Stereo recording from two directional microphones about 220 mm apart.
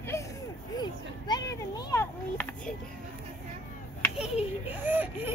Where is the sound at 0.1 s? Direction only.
10° left (ahead or behind).